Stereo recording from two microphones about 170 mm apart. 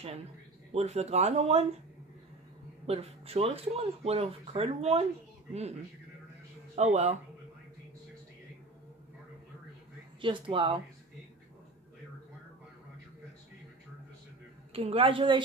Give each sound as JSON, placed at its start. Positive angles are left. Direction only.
{"t": 0.7, "sound": "speech", "side_deg": -40}
{"t": 2.9, "sound": "speech", "side_deg": -35}
{"t": 10.2, "sound": "speech", "side_deg": -30}
{"t": 14.7, "sound": "speech", "side_deg": -35}